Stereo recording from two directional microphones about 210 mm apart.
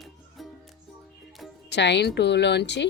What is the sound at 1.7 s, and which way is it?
Speech, 55° left (ahead or behind).